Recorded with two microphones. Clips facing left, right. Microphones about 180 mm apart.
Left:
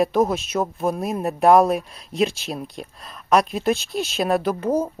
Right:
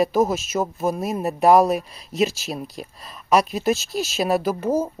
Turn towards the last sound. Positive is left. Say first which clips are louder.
# even
turn(degrees=-5)  # may be behind; listen again after turning